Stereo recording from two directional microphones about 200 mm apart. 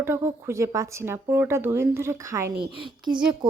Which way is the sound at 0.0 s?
15° right (ahead or behind).